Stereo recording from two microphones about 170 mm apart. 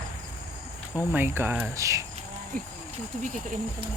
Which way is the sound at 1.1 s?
15° right (ahead or behind).